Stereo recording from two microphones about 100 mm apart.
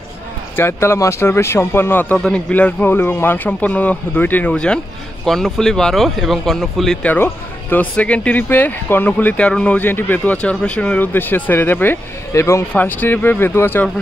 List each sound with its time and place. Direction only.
0.6 s speech: 25° left (ahead or behind)
2.1 s speech: 10° left (ahead or behind)
7.7 s speech: 15° left (ahead or behind)